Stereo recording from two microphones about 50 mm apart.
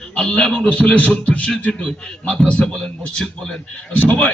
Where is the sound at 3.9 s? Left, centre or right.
Left.